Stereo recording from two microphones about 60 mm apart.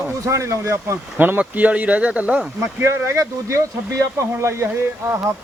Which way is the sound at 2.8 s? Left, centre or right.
Right.